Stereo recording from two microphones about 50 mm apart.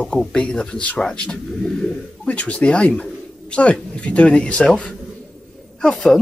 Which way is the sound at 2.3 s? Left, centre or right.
Left.